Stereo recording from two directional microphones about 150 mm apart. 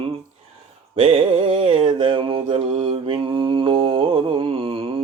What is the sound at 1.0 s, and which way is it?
Mantra, 40° right (ahead or behind).